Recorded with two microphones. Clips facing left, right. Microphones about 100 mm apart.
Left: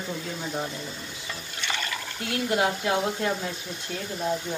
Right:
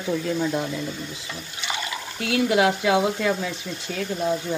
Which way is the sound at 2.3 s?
90° right.